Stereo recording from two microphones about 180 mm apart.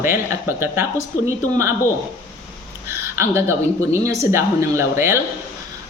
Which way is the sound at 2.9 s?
15° right (ahead or behind).